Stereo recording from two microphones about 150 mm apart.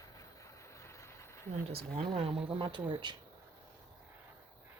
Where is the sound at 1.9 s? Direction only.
40° right (ahead or behind).